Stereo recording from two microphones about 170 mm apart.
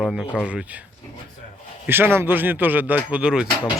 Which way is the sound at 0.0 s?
Centre (ahead or behind).